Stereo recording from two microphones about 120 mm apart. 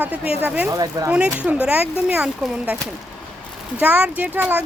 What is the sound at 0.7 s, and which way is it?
Speech, 30° right (ahead or behind).